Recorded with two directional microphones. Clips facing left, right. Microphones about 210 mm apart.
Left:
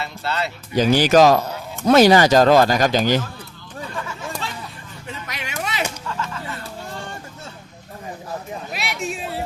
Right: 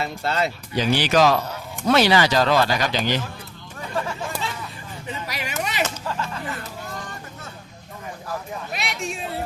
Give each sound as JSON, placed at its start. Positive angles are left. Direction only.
{"t": 0.0, "sound": "speech", "side_deg": -45}
{"t": 0.8, "sound": "speech", "side_deg": 45}
{"t": 4.4, "sound": "vehicle", "side_deg": 0}
{"t": 5.0, "sound": "a sound", "side_deg": 0}
{"t": 6.1, "sound": "a sound", "side_deg": -35}
{"t": 6.6, "sound": "hubbub", "side_deg": 30}
{"t": 8.7, "sound": "speech", "side_deg": 0}